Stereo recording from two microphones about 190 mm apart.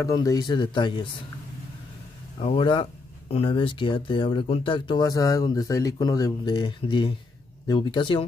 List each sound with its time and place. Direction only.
0.0 s speech: 20° left (ahead or behind)
2.3 s speech: 30° left (ahead or behind)